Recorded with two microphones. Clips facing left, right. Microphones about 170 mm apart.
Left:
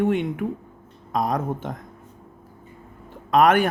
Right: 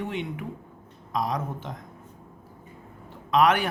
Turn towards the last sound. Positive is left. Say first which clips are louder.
# left 4 dB
turn(degrees=50)  # may be behind; listen again after turning